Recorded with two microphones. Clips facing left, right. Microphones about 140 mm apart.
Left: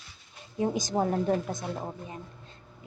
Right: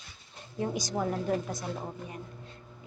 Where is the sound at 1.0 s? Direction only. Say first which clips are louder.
Left 5 dB; 35° left (ahead or behind).